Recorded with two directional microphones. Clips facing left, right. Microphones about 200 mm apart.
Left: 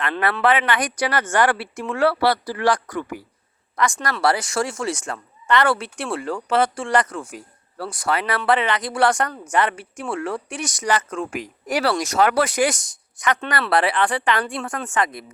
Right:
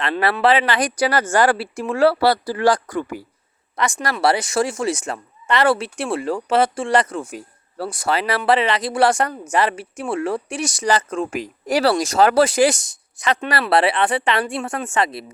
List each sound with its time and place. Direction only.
0.0 s speech: 30° right (ahead or behind)